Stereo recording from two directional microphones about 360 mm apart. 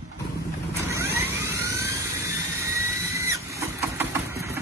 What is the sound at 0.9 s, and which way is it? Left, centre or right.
Vehicle, centre.